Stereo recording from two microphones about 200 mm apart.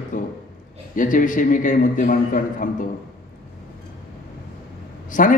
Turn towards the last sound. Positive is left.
turn(degrees=40)  # may be behind; listen again after turning